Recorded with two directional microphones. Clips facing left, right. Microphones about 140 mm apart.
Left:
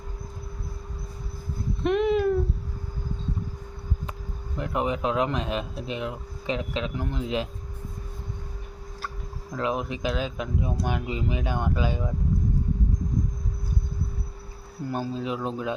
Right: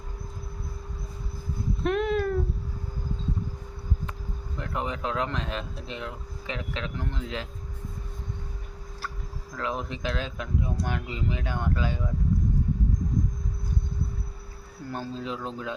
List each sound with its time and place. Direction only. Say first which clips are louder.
1.8 s a sound: left 4 dB; centre (ahead or behind)
4.5 s speech: left 5 dB; 15° left (ahead or behind)
9.6 s speech: left 4 dB; 15° left (ahead or behind)
14.8 s speech: left 4 dB; 10° left (ahead or behind)